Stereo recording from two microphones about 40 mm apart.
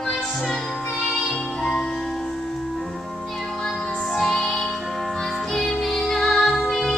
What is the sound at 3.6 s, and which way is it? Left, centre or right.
Music, centre.